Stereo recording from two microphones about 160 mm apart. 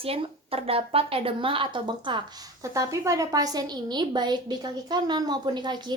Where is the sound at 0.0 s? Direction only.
35° right (ahead or behind).